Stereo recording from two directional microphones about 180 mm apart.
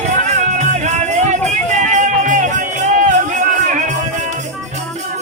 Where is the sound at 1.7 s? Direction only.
40° right (ahead or behind).